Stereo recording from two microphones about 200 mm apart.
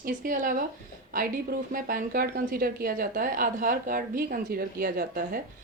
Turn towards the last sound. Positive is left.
turn(degrees=-45)  # may be behind; listen again after turning